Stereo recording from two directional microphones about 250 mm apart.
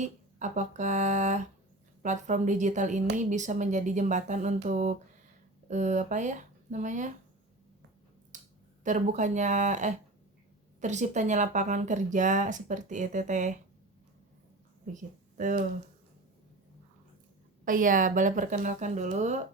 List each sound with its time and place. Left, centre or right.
0.0 s speech: right
8.3 s finger snapping: right
8.8 s speech: right
14.8 s speech: right
17.7 s a woman's voice: right